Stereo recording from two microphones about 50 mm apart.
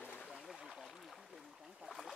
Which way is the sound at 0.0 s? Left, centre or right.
Left.